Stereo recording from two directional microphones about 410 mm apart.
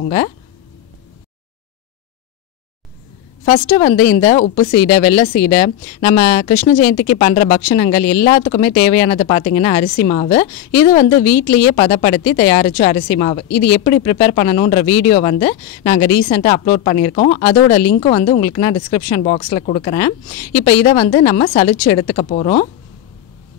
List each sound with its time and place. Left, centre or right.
0.0 s speech: centre
3.4 s a woman's voice: centre